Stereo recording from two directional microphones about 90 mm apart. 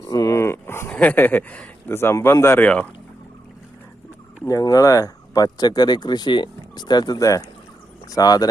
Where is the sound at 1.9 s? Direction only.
30° left (ahead or behind).